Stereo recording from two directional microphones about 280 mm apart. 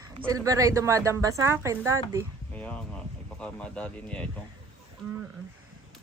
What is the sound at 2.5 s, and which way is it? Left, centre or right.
Speech, centre.